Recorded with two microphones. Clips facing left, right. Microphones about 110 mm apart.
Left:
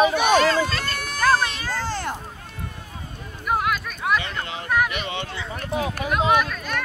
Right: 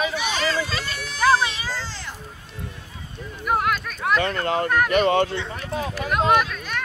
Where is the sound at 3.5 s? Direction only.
Centre (ahead or behind).